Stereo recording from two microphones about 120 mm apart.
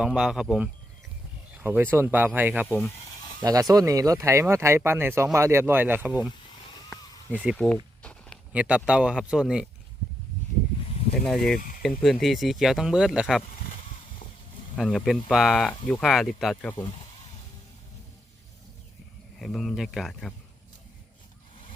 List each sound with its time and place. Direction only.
0.0 s speech: 5° right (ahead or behind)
3.4 s speech: 30° right (ahead or behind); by 6.3 s 15° right (ahead or behind)
7.5 s speech: 5° left (ahead or behind)
8.0 s a sound: 10° left (ahead or behind)
8.5 s speech: 10° right (ahead or behind)
11.3 s speech: 5° left (ahead or behind)
13.4 s a sound: 60° left (ahead or behind)
14.8 s speech: centre (ahead or behind)
16.7 s speech: 40° left (ahead or behind)
19.4 s speech: centre (ahead or behind)